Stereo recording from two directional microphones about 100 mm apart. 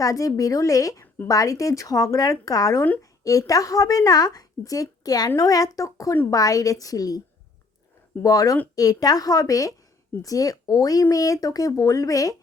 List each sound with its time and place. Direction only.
0.0 s a woman's voice: 35° left (ahead or behind)
8.2 s a woman's voice: 35° left (ahead or behind)